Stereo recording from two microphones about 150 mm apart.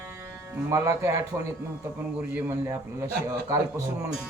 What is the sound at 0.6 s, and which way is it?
A man's voice, 20° right (ahead or behind).